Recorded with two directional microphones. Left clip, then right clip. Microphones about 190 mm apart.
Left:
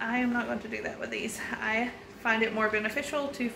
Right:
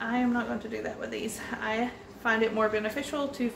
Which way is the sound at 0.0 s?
10° left (ahead or behind).